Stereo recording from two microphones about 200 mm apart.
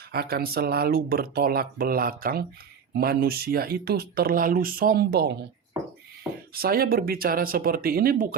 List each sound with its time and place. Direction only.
0.1 s speech: 50° right (ahead or behind)
6.5 s speech: 50° right (ahead or behind)